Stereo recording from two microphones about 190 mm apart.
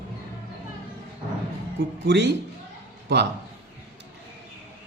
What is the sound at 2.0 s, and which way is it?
Speech, 65° right (ahead or behind).